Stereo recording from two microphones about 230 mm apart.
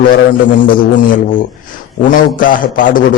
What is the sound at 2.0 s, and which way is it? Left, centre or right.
Speech, left.